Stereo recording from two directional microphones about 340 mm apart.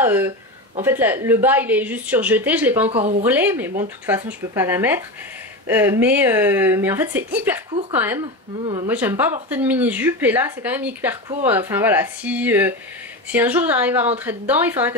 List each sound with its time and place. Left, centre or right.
0.0 s speech: centre
2.9 s a woman's voice: centre
3.3 s speech: centre